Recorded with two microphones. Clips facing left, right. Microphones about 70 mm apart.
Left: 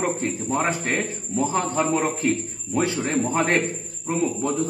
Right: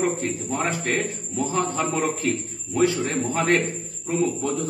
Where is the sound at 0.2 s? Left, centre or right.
Left.